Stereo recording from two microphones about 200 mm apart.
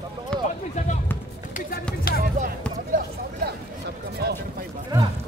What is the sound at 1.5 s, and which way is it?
Music, 50° left (ahead or behind).